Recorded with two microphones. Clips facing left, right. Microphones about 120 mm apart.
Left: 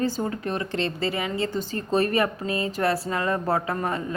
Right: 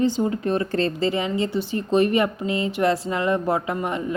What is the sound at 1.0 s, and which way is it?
A woman's voice, 25° right (ahead or behind).